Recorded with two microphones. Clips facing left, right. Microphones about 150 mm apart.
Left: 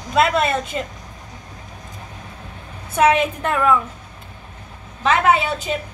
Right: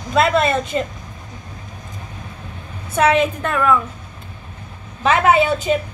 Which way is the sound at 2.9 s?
15° left (ahead or behind).